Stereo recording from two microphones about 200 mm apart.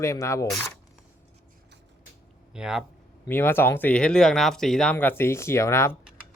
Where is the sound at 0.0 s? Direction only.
15° left (ahead or behind).